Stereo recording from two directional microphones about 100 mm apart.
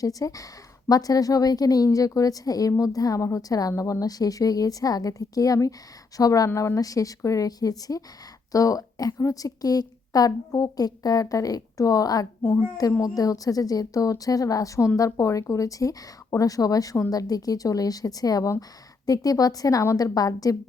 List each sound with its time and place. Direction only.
0.0 s a woman's voice: 35° left (ahead or behind)